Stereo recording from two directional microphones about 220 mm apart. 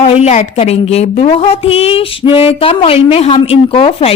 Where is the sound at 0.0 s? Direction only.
30° left (ahead or behind).